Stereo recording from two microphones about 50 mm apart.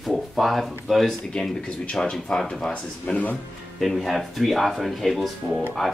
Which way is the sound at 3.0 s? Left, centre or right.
Left.